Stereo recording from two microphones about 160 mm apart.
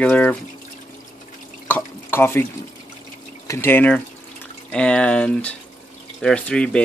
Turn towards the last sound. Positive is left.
turn(degrees=5)  # may be behind; listen again after turning